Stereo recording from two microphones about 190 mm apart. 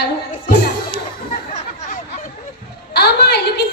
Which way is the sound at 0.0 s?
50° left (ahead or behind).